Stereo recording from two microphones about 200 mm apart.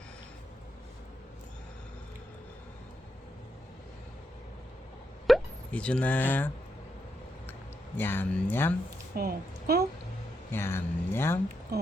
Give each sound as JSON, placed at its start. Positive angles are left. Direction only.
{"t": 5.2, "sound": "plop", "side_deg": 5}
{"t": 7.9, "sound": "speech", "side_deg": 10}
{"t": 9.1, "sound": "a woman's voice", "side_deg": -50}
{"t": 10.5, "sound": "speech", "side_deg": 10}
{"t": 11.7, "sound": "speech", "side_deg": -50}